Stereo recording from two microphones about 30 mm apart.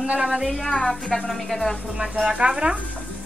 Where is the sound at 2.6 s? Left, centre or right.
Right.